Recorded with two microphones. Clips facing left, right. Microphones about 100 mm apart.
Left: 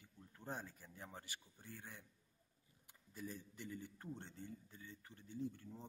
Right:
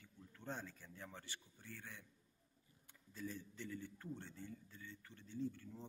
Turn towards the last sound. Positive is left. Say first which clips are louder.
# right 1 dB
turn(degrees=20)  # may be behind; listen again after turning